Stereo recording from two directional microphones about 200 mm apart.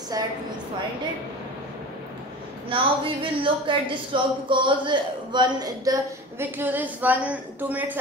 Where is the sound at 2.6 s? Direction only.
25° right (ahead or behind); by 7.9 s 10° right (ahead or behind).